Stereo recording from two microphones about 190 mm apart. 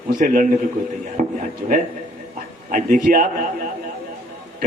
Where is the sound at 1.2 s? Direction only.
40° right (ahead or behind).